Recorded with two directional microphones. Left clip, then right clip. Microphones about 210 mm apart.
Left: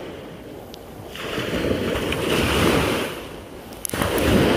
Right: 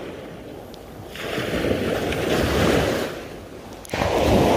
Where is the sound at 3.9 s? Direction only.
45° left (ahead or behind).